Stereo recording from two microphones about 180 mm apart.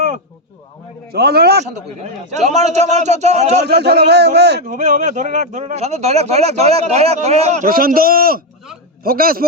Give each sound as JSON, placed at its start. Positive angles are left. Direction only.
{"t": 1.1, "sound": "a man's voice", "side_deg": -60}
{"t": 2.3, "sound": "a man's voice", "side_deg": -40}
{"t": 3.6, "sound": "speech", "side_deg": -65}
{"t": 4.6, "sound": "a man's voice", "side_deg": -45}